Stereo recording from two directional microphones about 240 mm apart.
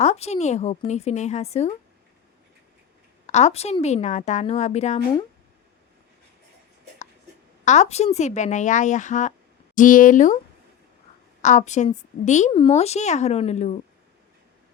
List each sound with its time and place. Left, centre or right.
0.0 s a woman's voice: left
3.2 s a woman's voice: left
7.6 s a woman's voice: left
11.4 s a woman's voice: left